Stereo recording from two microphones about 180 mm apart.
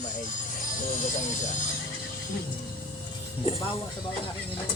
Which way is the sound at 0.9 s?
45° left (ahead or behind).